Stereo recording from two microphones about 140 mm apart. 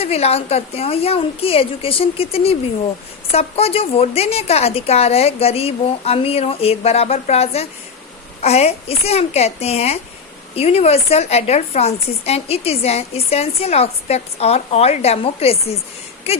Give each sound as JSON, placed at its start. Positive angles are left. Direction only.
{"t": 0.0, "sound": "a woman's voice", "side_deg": 45}